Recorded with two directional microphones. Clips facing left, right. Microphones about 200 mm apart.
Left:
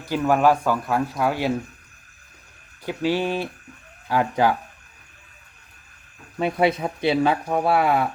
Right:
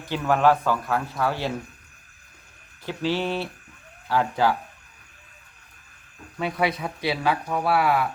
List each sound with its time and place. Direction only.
0.1 s speech: 10° left (ahead or behind)
2.8 s speech: 15° left (ahead or behind)
6.4 s speech: 25° left (ahead or behind)